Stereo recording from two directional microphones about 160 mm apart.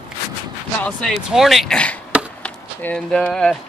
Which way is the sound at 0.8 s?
Centre (ahead or behind).